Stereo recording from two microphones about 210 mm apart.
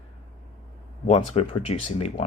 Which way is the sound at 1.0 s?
30° left (ahead or behind).